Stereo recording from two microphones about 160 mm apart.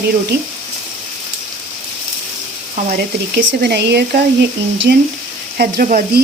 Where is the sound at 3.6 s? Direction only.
90° right.